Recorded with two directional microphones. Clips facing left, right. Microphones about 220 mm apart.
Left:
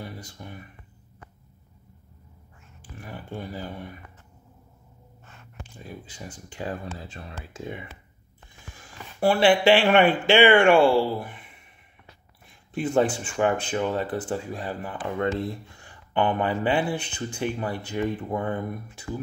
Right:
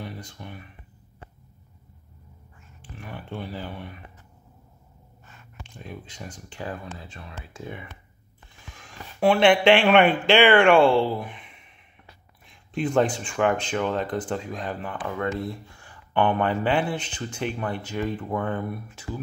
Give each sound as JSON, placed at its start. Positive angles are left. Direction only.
{"t": 0.0, "sound": "a sound", "side_deg": 10}
{"t": 3.0, "sound": "speech", "side_deg": 10}
{"t": 5.8, "sound": "speech", "side_deg": 5}
{"t": 6.6, "sound": "speech", "side_deg": 35}
{"t": 7.6, "sound": "speech", "side_deg": 20}
{"t": 8.8, "sound": "speech", "side_deg": 5}
{"t": 12.4, "sound": "speech", "side_deg": 5}
{"t": 15.0, "sound": "speech", "side_deg": 25}
{"t": 15.8, "sound": "speech", "side_deg": 15}